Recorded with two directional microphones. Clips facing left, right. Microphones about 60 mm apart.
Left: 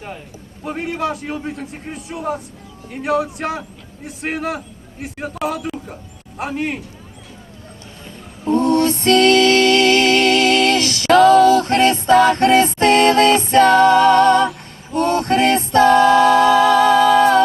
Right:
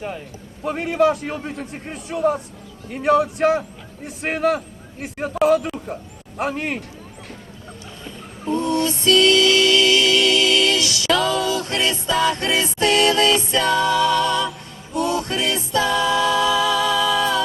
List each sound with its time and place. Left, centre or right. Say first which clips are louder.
0.6 s a man's voice: right 4 dB; centre
8.5 s music: left 6 dB; left